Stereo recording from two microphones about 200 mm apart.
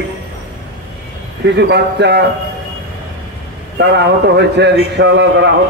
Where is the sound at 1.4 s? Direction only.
60° right (ahead or behind).